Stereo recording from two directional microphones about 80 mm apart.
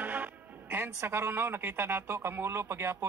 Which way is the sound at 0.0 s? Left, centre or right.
Right.